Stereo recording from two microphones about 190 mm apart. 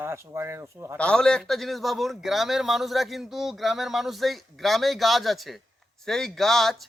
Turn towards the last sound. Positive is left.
turn(degrees=0)  # may be behind; listen again after turning